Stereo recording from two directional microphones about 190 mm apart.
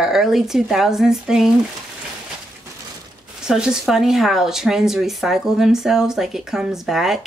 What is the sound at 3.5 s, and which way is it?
Speech, 5° right (ahead or behind).